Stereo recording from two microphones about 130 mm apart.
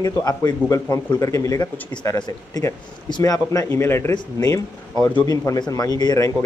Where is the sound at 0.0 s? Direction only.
25° left (ahead or behind).